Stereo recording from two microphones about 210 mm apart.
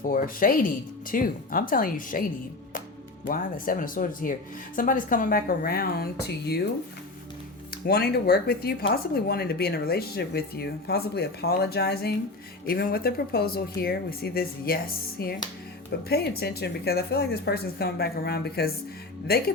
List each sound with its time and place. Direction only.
0.0 s speech: 40° left (ahead or behind)
3.2 s speech: 40° left (ahead or behind)
7.7 s speech: 50° left (ahead or behind)